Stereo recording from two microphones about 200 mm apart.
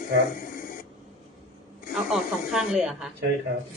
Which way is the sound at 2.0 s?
Centre (ahead or behind).